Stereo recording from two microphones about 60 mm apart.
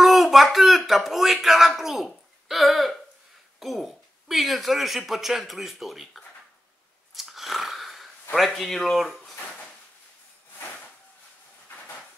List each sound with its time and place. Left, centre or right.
0.0 s speech: centre
7.2 s a sound: centre
8.5 s speech: centre